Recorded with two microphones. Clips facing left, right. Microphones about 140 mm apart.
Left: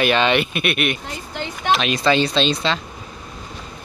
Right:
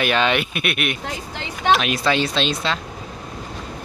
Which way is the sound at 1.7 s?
5° right (ahead or behind).